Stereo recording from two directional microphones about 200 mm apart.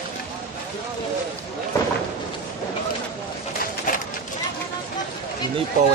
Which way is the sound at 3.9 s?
45° left (ahead or behind).